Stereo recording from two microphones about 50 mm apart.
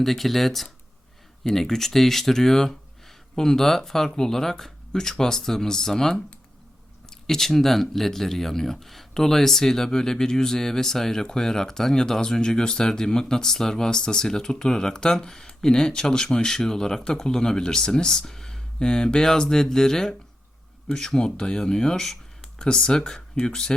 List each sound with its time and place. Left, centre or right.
0.0 s speech: centre